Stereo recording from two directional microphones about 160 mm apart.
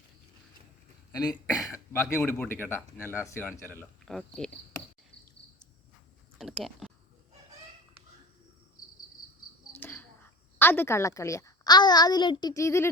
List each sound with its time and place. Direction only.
1.2 s a woman's voice: 25° left (ahead or behind)
4.1 s speech: 5° left (ahead or behind)
6.4 s a sound: centre (ahead or behind)
9.8 s cricket: 10° left (ahead or behind)
10.6 s a woman's voice: 15° left (ahead or behind)